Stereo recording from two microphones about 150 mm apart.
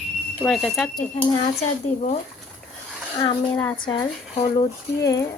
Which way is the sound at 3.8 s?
30° left (ahead or behind).